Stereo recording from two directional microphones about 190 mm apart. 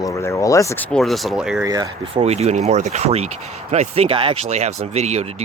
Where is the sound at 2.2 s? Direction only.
35° right (ahead or behind).